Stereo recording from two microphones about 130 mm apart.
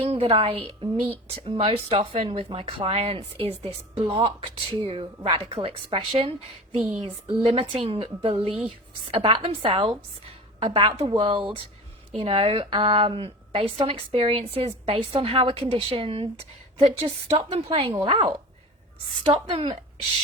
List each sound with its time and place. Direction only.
0.0 s speech: 50° right (ahead or behind)
7.4 s speech: 45° right (ahead or behind)